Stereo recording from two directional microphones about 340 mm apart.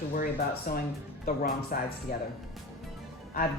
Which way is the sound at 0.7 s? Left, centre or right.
Left.